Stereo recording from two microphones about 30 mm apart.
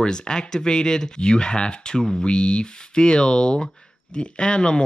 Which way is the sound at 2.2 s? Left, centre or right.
Left.